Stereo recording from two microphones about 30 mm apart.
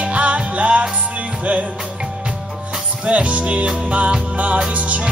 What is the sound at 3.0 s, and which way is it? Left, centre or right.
Music, right.